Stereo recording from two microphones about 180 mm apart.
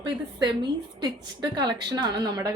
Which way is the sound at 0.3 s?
25° right (ahead or behind).